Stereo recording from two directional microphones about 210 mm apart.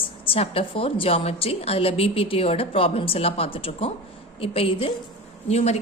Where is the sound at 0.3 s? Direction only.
25° left (ahead or behind).